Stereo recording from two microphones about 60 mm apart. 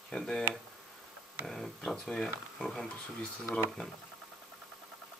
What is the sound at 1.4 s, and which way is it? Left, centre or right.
Speech, centre.